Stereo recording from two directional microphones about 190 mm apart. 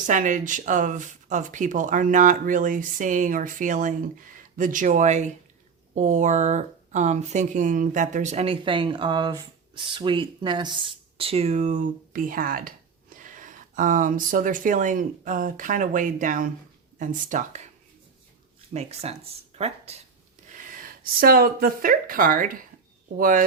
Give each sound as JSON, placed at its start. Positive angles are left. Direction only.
{"t": 0.1, "sound": "speech", "side_deg": -40}
{"t": 18.7, "sound": "speech", "side_deg": -35}
{"t": 20.5, "sound": "speech", "side_deg": -50}